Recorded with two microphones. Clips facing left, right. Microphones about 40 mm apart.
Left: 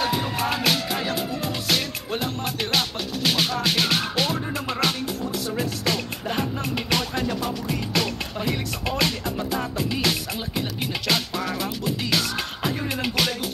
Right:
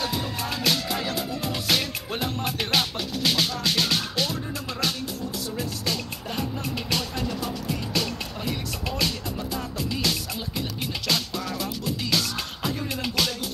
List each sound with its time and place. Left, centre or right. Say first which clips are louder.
0.0 s music: left 5 dB; left
0.8 s music: left 2 dB; centre
1.4 s music: right 2 dB; centre
3.3 s music: left 2 dB; left
4.2 s music: left 3 dB; left
5.6 s music: left 4 dB; left
9.8 s music: left 1 dB; left